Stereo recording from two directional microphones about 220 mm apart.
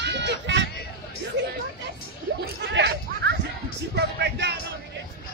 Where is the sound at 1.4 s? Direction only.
50° right (ahead or behind).